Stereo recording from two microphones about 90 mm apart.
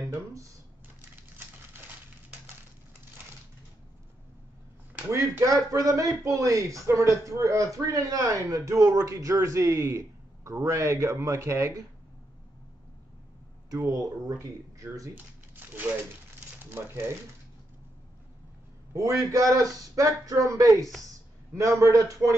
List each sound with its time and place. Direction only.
0.0 s speech: 40° right (ahead or behind)
5.4 s a man's voice: 40° right (ahead or behind)
13.9 s a man's voice: 40° right (ahead or behind)
15.6 s crumpling: 20° right (ahead or behind)
16.6 s speech: 25° right (ahead or behind)
18.9 s a man's voice: 40° right (ahead or behind)